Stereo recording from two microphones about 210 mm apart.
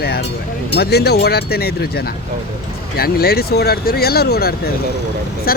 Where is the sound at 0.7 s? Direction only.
50° left (ahead or behind).